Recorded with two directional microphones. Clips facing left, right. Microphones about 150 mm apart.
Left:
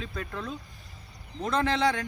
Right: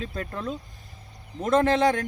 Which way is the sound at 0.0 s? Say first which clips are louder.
Right 4 dB; 40° right (ahead or behind).